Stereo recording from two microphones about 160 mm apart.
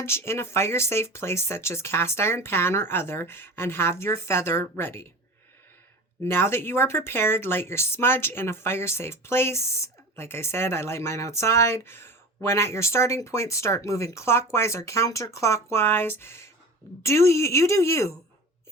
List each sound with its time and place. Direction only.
0.0 s speech: 15° left (ahead or behind)
6.2 s speech: 15° left (ahead or behind)